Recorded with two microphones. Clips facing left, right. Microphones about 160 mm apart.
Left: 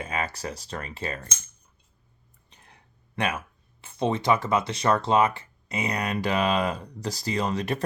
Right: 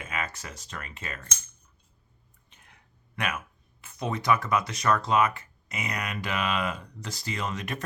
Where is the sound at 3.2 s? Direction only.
30° left (ahead or behind).